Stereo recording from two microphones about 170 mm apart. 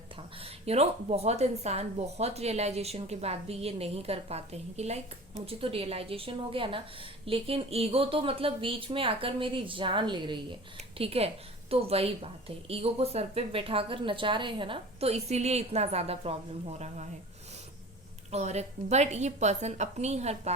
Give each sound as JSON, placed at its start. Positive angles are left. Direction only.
{"t": 0.4, "sound": "a woman's voice", "side_deg": -40}
{"t": 18.3, "sound": "a woman's voice", "side_deg": -40}